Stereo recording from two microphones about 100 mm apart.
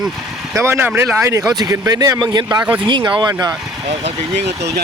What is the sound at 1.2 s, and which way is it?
Speech, 35° right (ahead or behind).